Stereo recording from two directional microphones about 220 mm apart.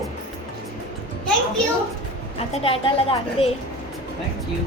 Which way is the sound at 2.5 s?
25° left (ahead or behind).